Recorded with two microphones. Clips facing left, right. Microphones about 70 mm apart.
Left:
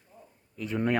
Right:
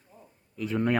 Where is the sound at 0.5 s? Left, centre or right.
Centre.